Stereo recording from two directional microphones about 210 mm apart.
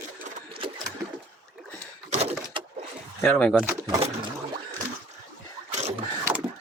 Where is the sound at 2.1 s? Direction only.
30° right (ahead or behind).